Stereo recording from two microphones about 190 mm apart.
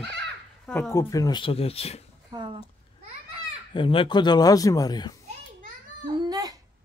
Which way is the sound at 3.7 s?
25° left (ahead or behind).